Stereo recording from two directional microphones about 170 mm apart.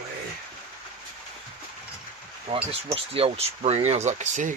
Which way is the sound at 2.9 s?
35° right (ahead or behind).